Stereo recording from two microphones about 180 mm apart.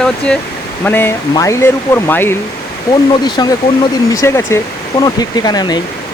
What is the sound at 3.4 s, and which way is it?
Speech, 20° left (ahead or behind).